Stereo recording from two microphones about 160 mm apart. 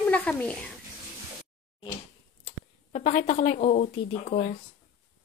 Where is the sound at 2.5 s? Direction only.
40° left (ahead or behind).